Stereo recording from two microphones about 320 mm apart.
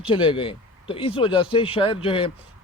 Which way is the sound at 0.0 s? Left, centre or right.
Centre.